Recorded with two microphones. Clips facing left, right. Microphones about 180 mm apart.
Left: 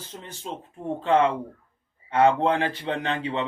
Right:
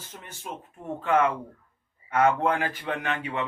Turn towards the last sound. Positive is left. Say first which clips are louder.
# left 3 dB
turn(degrees=25)  # may be behind; listen again after turning